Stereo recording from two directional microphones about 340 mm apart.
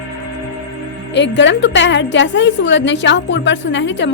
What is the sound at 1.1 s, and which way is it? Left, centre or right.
A woman's voice, left.